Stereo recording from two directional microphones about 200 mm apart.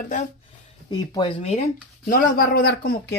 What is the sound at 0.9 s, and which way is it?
Speech, 25° left (ahead or behind).